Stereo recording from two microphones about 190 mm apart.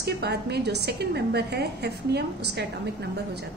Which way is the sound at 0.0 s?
60° right (ahead or behind).